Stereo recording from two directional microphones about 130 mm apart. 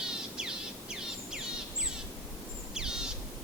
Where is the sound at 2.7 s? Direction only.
5° right (ahead or behind).